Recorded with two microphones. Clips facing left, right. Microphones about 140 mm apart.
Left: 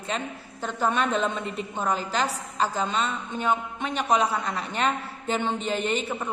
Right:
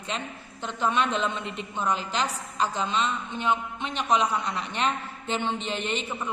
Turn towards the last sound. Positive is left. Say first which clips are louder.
# left 3 dB
turn(degrees=40)  # may be behind; listen again after turning